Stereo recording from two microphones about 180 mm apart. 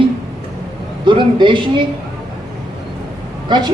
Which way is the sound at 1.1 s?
25° right (ahead or behind).